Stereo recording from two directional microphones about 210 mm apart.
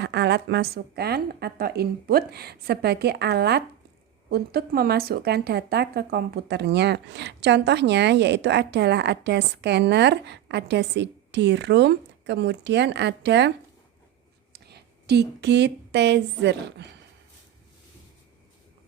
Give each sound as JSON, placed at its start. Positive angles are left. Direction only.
{"t": 0.0, "sound": "speech", "side_deg": -55}
{"t": 14.5, "sound": "speech", "side_deg": -50}